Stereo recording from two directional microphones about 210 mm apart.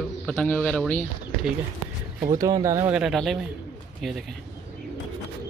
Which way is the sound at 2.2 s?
15° right (ahead or behind).